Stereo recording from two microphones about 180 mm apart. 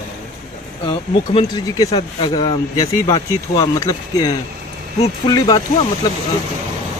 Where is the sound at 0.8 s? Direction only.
25° left (ahead or behind).